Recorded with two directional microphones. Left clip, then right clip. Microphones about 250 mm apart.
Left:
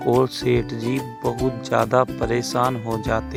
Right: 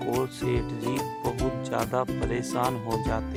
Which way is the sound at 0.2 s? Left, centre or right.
Centre.